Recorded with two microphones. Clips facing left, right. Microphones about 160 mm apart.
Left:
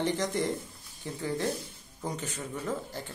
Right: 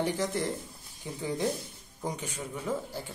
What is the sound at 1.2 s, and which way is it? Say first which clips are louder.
Speech: right 1 dB; 15° right (ahead or behind).